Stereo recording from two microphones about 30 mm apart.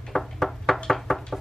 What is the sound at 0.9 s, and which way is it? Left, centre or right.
Knock, centre.